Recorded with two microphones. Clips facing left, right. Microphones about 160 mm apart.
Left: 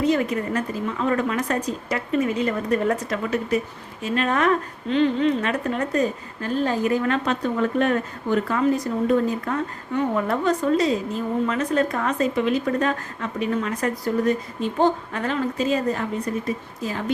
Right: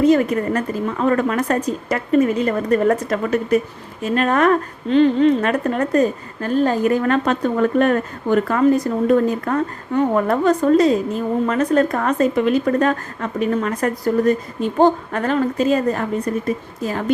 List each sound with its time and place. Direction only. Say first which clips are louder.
0.0 s a woman's voice: right 6 dB; 50° right (ahead or behind)